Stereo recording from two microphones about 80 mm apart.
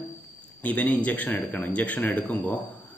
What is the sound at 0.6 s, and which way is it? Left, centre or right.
Speech, centre.